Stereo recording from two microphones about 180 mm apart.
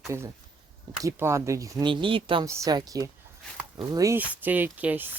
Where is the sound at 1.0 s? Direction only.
15° right (ahead or behind).